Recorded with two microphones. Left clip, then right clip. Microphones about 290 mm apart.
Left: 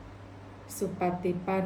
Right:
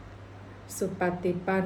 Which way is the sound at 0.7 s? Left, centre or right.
Centre.